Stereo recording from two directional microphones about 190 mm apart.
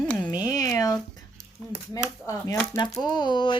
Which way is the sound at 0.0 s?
5° left (ahead or behind).